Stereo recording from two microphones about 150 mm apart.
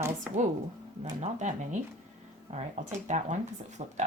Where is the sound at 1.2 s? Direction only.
55° right (ahead or behind).